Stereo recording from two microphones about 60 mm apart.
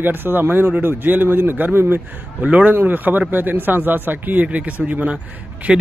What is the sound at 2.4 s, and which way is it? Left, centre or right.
A man's voice, right.